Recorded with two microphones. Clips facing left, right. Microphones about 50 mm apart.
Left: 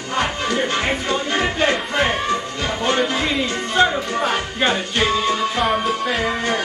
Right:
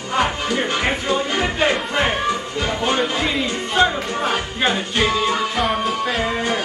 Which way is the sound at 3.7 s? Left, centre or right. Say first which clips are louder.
Left 1 dB; centre.